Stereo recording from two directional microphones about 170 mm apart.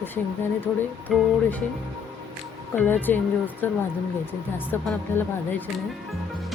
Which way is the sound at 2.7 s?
10° left (ahead or behind).